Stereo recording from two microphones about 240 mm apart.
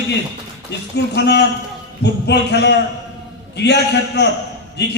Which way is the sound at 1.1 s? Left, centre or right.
Left.